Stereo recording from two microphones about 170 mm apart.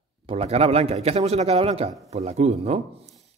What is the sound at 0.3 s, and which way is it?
Speech, 40° right (ahead or behind).